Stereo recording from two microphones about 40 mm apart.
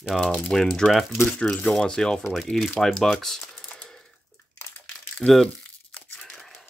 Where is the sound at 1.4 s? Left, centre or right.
Left.